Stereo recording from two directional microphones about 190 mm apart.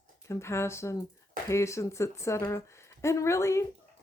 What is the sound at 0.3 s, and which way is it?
A woman's voice, 15° left (ahead or behind).